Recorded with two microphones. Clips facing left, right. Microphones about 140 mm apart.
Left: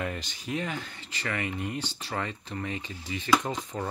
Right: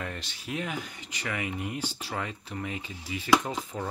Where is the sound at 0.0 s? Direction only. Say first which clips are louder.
Left 4 dB; centre (ahead or behind).